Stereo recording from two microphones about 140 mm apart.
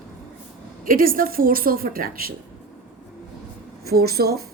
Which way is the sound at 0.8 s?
85° right.